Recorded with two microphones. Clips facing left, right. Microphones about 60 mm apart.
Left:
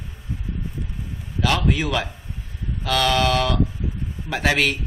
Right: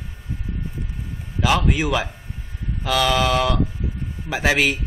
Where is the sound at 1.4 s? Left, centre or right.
Centre.